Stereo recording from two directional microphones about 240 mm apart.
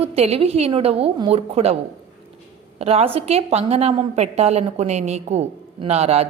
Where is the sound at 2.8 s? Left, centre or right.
Right.